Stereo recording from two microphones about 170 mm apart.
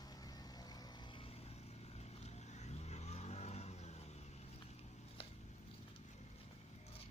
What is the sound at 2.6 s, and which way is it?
Vehicle, 40° left (ahead or behind).